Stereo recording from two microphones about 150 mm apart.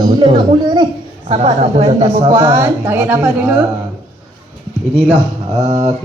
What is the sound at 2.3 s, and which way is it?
A woman's voice, 20° right (ahead or behind).